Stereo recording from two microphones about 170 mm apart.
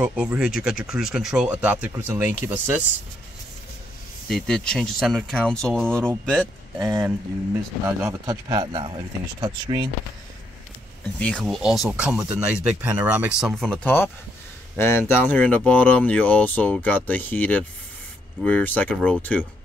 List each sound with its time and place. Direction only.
0.0 s speech: 10° right (ahead or behind)
4.3 s speech: 5° left (ahead or behind)
8.0 s speech: 20° right (ahead or behind)
11.1 s speech: 5° left (ahead or behind)